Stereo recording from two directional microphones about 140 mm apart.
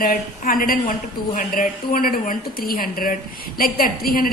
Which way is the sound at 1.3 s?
75° left (ahead or behind).